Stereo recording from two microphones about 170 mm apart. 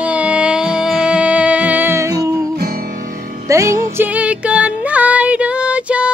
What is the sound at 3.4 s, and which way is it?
Music, 20° right (ahead or behind).